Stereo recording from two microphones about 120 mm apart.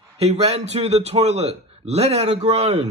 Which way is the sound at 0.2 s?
65° right (ahead or behind).